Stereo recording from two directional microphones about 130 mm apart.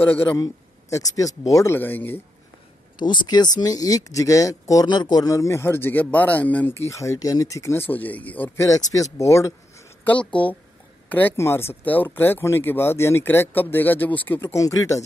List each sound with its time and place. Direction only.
0.0 s speech: 15° left (ahead or behind)
0.4 s a man's voice: 25° left (ahead or behind)
3.0 s speech: 35° left (ahead or behind); by 8.6 s 15° left (ahead or behind)
8.9 s speech: 25° left (ahead or behind)
10.0 s speech: 10° left (ahead or behind)